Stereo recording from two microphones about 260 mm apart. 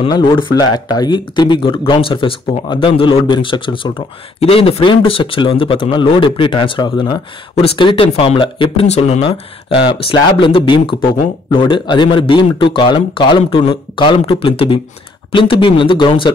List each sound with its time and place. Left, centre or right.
0.0 s a man's voice: centre